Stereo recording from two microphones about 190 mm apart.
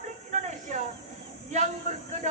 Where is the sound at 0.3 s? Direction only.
35° right (ahead or behind).